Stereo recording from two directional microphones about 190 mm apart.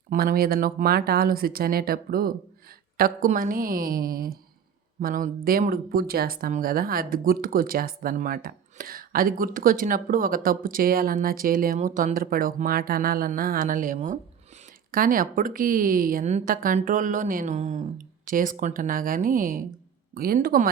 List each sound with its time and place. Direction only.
0.1 s speech: 50° right (ahead or behind)